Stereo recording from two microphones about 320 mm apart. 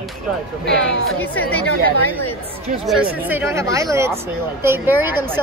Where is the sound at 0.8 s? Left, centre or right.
Left.